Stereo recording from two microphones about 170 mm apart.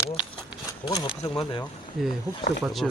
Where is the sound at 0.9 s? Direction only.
30° left (ahead or behind).